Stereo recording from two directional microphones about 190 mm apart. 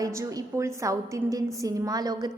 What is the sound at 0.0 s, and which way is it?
A woman's voice, 15° right (ahead or behind).